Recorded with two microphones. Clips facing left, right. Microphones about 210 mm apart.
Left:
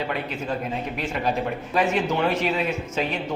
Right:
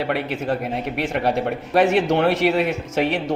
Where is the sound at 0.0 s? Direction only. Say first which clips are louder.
Right 5 dB; 75° right (ahead or behind).